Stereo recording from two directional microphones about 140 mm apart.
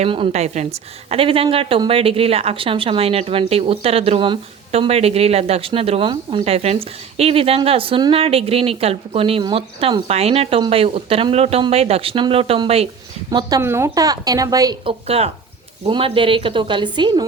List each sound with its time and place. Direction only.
0.0 s a woman's voice: 45° right (ahead or behind)
13.6 s speech: 20° right (ahead or behind)
14.8 s a woman's voice: 45° right (ahead or behind)